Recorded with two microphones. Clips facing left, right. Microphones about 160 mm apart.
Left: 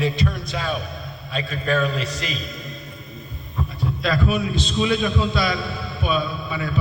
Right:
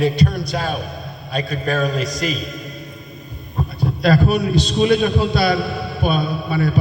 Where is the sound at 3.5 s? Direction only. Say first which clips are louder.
Right 4 dB; 35° right (ahead or behind).